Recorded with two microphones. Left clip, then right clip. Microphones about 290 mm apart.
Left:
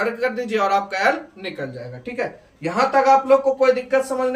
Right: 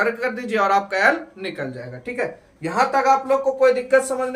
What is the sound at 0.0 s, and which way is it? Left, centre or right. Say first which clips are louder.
Speech: even; centre.